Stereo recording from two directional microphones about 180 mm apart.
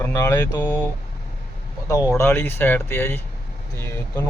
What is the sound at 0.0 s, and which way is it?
Speech, 15° left (ahead or behind).